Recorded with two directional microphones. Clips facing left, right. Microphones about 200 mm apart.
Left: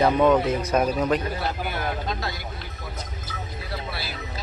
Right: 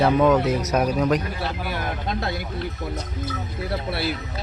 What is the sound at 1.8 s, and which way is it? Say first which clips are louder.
Speech: right 1 dB; 50° right (ahead or behind).